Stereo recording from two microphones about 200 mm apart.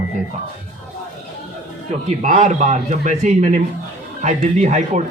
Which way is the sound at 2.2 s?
35° right (ahead or behind).